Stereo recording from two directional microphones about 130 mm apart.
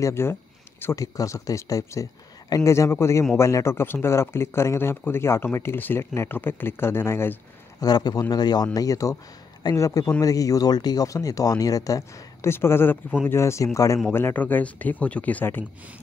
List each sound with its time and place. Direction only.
0.0 s speech: 20° left (ahead or behind)
7.8 s a man's voice: 30° left (ahead or behind); by 15.6 s 15° left (ahead or behind)